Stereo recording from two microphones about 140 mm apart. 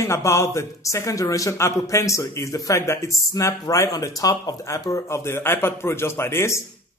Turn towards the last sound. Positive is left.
turn(degrees=20)  # may be behind; listen again after turning